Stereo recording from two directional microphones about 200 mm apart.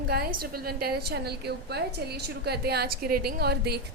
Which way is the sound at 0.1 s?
50° right (ahead or behind).